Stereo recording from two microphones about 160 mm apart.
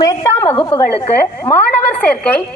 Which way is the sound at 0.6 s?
30° left (ahead or behind).